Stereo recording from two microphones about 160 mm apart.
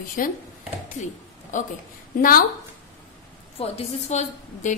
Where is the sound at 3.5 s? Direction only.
40° left (ahead or behind).